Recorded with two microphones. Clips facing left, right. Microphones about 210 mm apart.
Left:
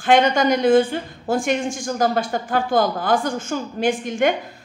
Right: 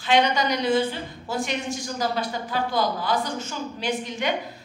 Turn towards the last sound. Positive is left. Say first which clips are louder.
# left 7 dB
turn(degrees=50)  # may be behind; listen again after turning